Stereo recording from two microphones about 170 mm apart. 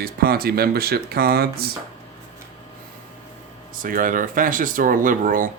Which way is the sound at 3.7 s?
55° right (ahead or behind).